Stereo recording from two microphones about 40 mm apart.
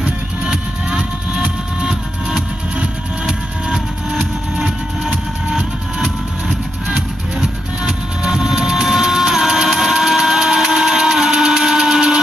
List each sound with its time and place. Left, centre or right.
0.5 s vehicle: centre
1.9 s music: centre
3.6 s music: centre
7.3 s music: centre
9.7 s a sound: centre